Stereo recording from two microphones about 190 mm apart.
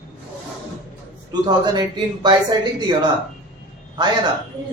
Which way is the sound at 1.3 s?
20° right (ahead or behind).